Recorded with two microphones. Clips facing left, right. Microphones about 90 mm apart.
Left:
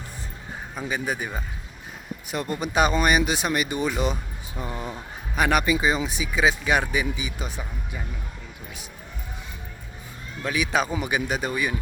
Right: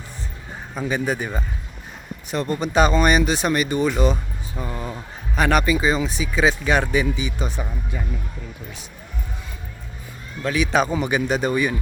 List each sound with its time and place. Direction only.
0.8 s a man's voice: 5° left (ahead or behind)
4.6 s a sound: 15° left (ahead or behind)
5.3 s speech: 10° left (ahead or behind)
10.4 s speech: 5° left (ahead or behind)